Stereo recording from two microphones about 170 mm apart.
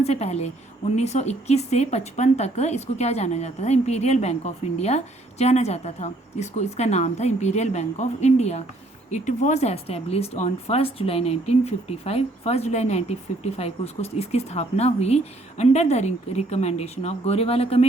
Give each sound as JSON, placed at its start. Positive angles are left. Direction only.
{"t": 0.0, "sound": "speech", "side_deg": 40}